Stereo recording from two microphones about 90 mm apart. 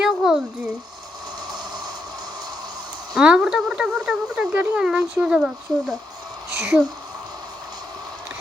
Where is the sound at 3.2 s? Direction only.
10° right (ahead or behind).